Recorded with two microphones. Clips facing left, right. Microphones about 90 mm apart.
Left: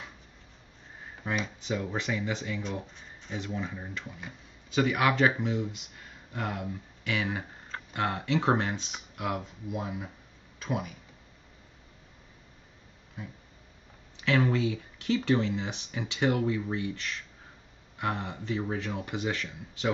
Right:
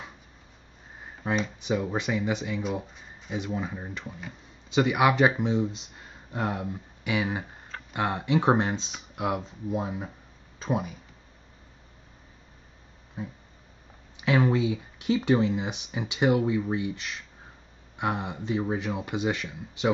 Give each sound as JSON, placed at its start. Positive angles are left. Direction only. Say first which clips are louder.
{"t": 1.2, "sound": "speech", "louder": "right 4 dB", "side_deg": -20}
{"t": 2.6, "sound": "speech", "louder": "right 5 dB", "side_deg": -5}
{"t": 3.7, "sound": "speech", "louder": "right 3 dB", "side_deg": -20}
{"t": 7.1, "sound": "speech", "louder": "right 3 dB", "side_deg": -15}
{"t": 14.1, "sound": "speech", "louder": "right 3 dB", "side_deg": -20}